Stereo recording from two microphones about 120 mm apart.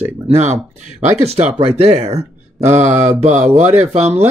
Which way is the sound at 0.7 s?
70° right (ahead or behind).